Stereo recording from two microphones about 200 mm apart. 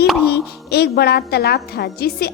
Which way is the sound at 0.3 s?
55° left (ahead or behind).